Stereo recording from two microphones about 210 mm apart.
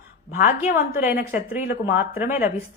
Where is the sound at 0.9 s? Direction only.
10° right (ahead or behind).